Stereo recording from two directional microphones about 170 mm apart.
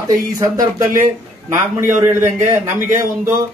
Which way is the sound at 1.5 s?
50° right (ahead or behind).